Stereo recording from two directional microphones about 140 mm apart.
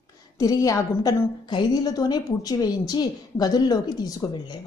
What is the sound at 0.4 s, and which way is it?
A woman's voice, 25° left (ahead or behind).